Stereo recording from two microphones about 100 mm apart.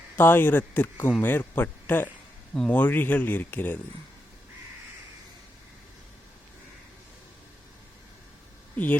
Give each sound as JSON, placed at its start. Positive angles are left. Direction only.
{"t": 0.2, "sound": "speech", "side_deg": 20}
{"t": 8.7, "sound": "speech", "side_deg": 15}